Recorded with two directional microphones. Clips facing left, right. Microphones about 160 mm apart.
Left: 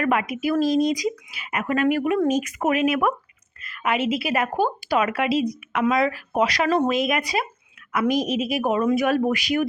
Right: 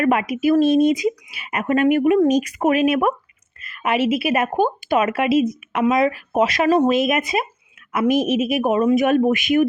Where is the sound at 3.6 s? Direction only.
25° right (ahead or behind).